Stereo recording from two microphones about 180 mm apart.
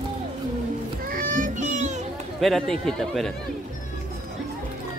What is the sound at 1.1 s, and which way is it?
Children playing, 50° right (ahead or behind).